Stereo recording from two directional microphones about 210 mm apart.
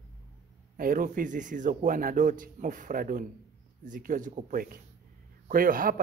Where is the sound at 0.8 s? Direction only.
40° right (ahead or behind).